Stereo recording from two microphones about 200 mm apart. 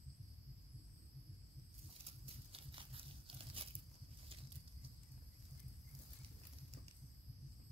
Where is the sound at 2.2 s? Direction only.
25° right (ahead or behind).